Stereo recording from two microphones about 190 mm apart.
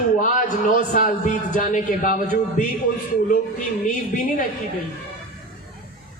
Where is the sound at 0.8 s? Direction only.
45° left (ahead or behind).